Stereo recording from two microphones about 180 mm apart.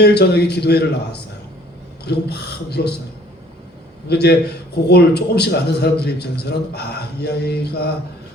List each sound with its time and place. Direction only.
0.0 s a man's voice: 65° left (ahead or behind)
4.1 s a man's voice: 65° left (ahead or behind)